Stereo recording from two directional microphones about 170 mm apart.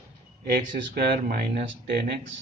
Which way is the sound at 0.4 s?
65° right (ahead or behind).